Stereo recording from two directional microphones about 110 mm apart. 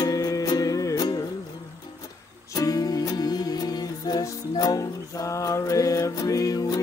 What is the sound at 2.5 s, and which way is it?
Music, 35° left (ahead or behind).